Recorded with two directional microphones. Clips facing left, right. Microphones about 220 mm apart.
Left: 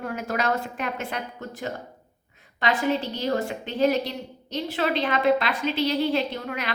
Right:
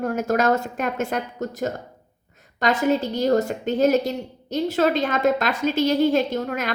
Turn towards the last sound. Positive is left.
turn(degrees=-45)  # may be behind; listen again after turning